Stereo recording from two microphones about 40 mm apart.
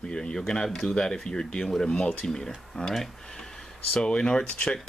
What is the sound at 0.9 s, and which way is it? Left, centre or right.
Speech, left.